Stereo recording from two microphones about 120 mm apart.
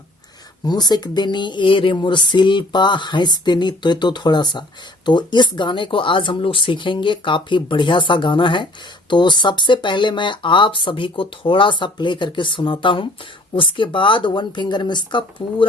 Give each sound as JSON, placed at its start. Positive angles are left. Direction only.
{"t": 0.6, "sound": "speech", "side_deg": 35}